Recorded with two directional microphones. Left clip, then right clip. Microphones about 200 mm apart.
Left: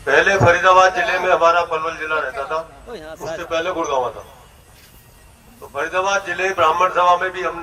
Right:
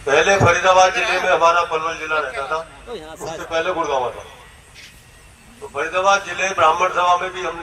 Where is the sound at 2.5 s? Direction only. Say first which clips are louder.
Even; 30° right (ahead or behind).